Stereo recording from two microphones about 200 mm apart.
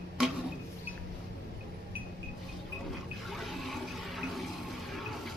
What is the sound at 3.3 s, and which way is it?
Water, centre (ahead or behind).